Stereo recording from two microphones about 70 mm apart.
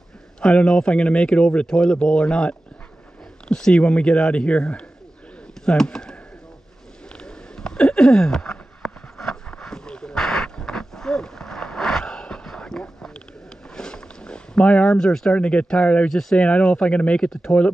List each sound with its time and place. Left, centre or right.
0.4 s speech: centre
7.1 s a sound: centre
13.7 s speech: centre
16.1 s speech: centre
16.3 s speech: centre